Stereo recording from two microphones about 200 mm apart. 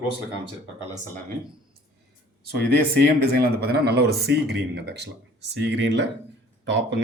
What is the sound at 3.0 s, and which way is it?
A man's voice, 50° right (ahead or behind).